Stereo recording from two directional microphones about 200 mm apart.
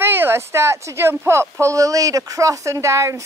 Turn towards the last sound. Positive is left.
turn(degrees=-15)  # may be behind; listen again after turning